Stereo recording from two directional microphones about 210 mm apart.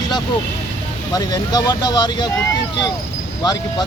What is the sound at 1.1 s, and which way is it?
Speech, 20° left (ahead or behind).